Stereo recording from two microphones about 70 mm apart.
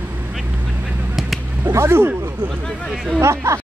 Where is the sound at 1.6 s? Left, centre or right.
Right.